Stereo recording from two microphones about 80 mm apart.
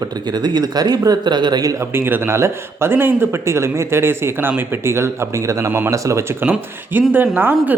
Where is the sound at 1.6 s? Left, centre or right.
Right.